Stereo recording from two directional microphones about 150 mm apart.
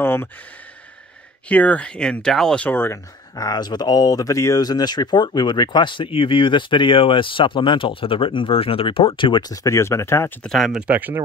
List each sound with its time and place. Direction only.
0.0 s speech: 15° left (ahead or behind)
1.5 s speech: 10° left (ahead or behind)
10.4 s speech: centre (ahead or behind)